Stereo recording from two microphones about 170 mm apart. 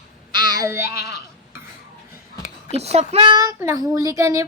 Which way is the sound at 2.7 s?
40° right (ahead or behind).